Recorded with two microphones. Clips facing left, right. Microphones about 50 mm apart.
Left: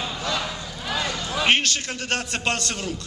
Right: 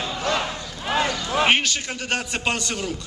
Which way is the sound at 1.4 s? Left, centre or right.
Centre.